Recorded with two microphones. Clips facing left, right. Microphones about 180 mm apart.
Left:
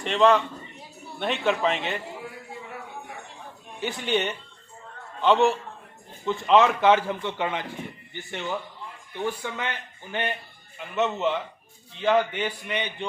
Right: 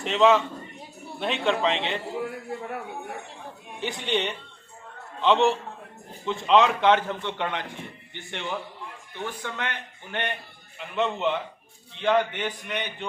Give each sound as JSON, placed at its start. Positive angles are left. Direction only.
{"t": 0.0, "sound": "a man's voice", "side_deg": 0}
{"t": 2.5, "sound": "a sound", "side_deg": -60}
{"t": 3.8, "sound": "a man's voice", "side_deg": 5}